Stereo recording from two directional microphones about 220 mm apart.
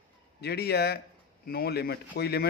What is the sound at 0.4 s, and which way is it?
Speech, 45° left (ahead or behind).